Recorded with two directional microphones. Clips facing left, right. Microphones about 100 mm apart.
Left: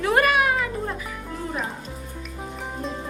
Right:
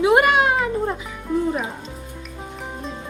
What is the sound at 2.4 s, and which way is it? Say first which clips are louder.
Music: left 1 dB; centre (ahead or behind).